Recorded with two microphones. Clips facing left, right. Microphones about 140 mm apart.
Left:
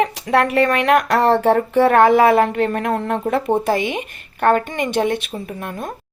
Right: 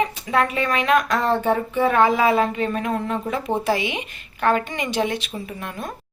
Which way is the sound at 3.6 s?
50° left (ahead or behind).